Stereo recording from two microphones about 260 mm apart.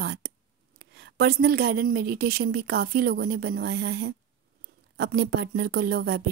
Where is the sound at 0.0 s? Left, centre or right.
Right.